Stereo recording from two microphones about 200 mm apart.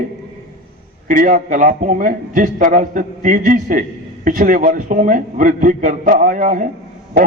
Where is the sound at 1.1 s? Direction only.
40° right (ahead or behind).